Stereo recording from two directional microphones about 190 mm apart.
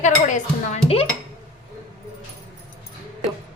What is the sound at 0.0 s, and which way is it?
A woman's voice, 40° left (ahead or behind).